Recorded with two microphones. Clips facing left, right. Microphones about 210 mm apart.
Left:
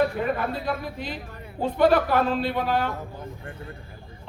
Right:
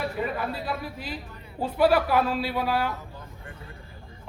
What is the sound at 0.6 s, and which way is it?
A woman's voice, 5° right (ahead or behind).